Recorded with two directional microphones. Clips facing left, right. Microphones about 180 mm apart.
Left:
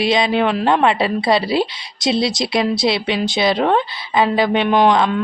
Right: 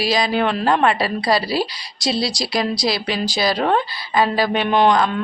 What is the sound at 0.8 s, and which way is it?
A woman's voice, 25° left (ahead or behind).